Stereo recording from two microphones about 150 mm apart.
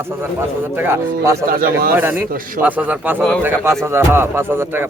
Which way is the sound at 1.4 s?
80° right.